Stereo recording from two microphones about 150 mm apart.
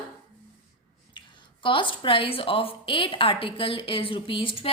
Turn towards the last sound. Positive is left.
turn(degrees=35)  # may be behind; listen again after turning